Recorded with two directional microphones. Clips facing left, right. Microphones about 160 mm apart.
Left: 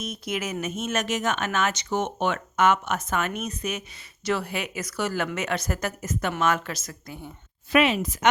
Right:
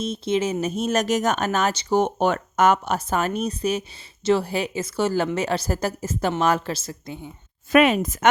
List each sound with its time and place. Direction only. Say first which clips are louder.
0.0 s speech: right 8 dB; 30° right (ahead or behind)
7.7 s a woman's voice: right 4 dB; 45° right (ahead or behind)